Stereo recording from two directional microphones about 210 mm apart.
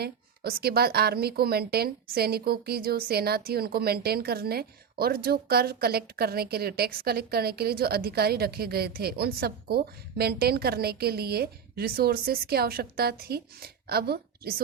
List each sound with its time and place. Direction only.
0.0 s a woman's voice: 50° right (ahead or behind)